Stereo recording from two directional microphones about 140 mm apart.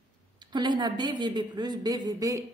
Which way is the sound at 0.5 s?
30° right (ahead or behind).